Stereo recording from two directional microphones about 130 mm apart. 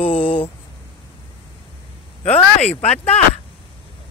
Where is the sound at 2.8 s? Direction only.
55° left (ahead or behind).